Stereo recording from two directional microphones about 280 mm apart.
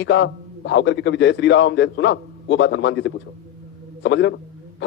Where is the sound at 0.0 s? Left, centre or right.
Left.